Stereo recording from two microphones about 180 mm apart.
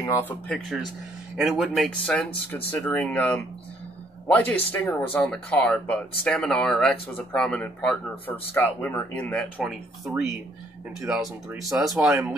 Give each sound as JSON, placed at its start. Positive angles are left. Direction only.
{"t": 0.0, "sound": "speech", "side_deg": 15}
{"t": 0.5, "sound": "speech", "side_deg": 0}
{"t": 4.5, "sound": "speech", "side_deg": 10}